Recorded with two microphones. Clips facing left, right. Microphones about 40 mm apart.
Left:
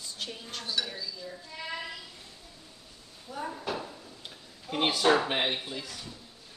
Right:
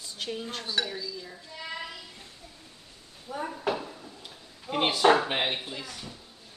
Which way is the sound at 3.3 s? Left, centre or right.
Right.